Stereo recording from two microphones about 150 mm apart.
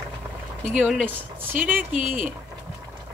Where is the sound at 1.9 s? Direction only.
60° right (ahead or behind).